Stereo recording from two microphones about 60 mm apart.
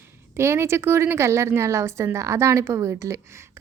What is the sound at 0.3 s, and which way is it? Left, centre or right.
A woman's voice, right.